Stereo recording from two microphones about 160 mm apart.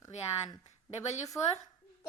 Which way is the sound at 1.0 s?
45° left (ahead or behind).